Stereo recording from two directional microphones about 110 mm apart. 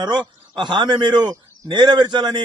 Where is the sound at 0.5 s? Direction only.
45° right (ahead or behind).